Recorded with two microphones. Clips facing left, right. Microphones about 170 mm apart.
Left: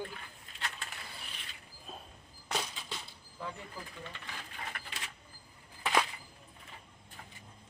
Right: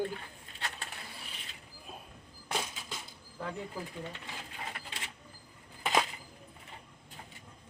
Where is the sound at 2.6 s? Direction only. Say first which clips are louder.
Right 1 dB; 5° right (ahead or behind).